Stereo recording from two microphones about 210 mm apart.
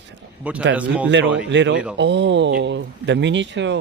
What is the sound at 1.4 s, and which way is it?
Speech, 60° right (ahead or behind).